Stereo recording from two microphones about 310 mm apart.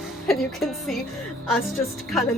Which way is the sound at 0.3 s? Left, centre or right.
Centre.